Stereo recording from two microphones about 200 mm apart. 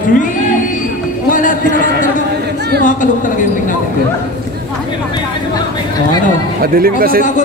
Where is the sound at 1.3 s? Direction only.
40° left (ahead or behind).